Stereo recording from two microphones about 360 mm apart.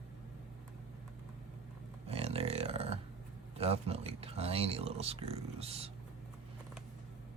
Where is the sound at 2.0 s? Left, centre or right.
Centre.